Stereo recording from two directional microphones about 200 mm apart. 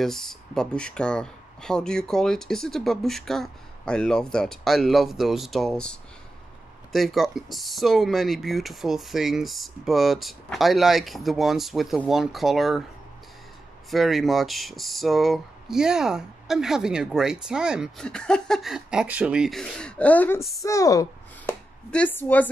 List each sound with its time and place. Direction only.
0.0 s speech: centre (ahead or behind)
13.8 s speech: centre (ahead or behind)
20.6 s a sound: 15° left (ahead or behind)
21.9 s a woman's voice: 10° left (ahead or behind)